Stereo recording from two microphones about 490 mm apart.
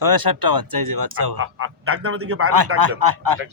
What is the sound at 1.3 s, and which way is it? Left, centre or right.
A man's voice, right.